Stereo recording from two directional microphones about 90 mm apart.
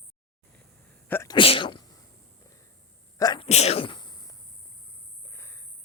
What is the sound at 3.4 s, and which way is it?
Sneeze, 80° left.